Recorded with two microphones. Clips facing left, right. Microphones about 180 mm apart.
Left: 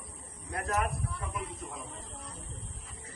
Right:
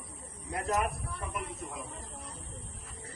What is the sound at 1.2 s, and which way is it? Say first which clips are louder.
Speech: even; centre (ahead or behind).